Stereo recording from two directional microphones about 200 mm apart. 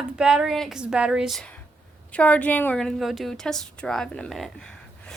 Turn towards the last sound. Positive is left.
turn(degrees=5)  # may be behind; listen again after turning